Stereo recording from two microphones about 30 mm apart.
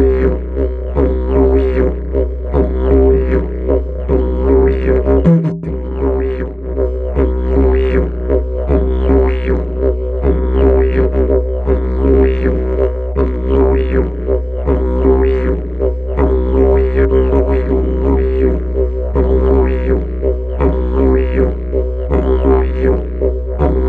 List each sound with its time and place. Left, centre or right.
0.0 s music: left